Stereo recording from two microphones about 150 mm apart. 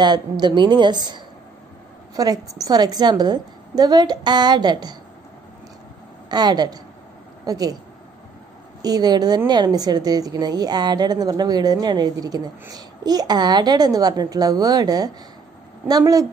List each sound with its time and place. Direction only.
0.0 s a woman's voice: 30° right (ahead or behind)
6.2 s a woman's voice: 30° right (ahead or behind)
8.8 s a woman's voice: 25° right (ahead or behind)